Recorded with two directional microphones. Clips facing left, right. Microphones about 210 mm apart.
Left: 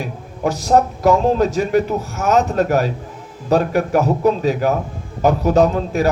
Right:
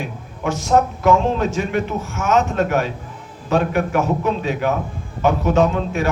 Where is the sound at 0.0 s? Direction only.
35° left (ahead or behind).